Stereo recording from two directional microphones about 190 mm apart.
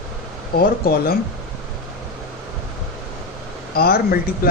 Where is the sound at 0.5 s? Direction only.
55° left (ahead or behind).